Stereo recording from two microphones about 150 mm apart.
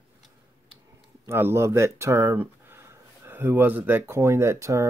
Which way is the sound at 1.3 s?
15° right (ahead or behind).